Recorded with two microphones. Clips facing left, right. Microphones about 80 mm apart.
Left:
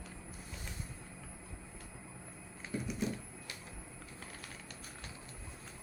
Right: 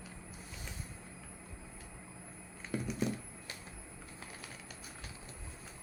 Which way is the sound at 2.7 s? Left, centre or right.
Right.